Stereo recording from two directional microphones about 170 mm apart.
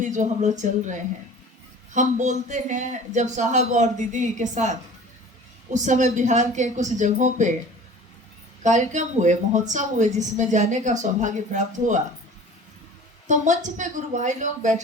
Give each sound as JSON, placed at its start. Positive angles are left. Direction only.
{"t": 0.0, "sound": "a woman's voice", "side_deg": -45}
{"t": 8.6, "sound": "a woman's voice", "side_deg": -45}
{"t": 13.2, "sound": "a woman's voice", "side_deg": -45}